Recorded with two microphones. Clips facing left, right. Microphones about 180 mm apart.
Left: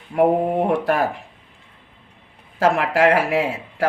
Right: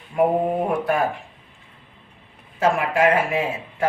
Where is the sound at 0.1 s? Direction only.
60° left (ahead or behind).